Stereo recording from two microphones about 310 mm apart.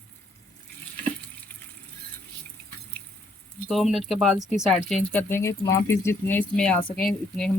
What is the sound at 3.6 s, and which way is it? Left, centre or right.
Speech, centre.